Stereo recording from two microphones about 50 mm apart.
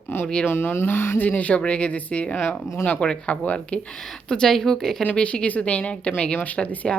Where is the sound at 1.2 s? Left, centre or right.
Left.